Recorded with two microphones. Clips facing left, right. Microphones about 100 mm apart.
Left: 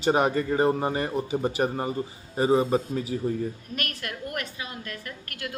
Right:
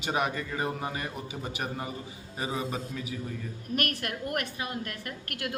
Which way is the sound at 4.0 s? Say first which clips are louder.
Right 1 dB; 50° right (ahead or behind).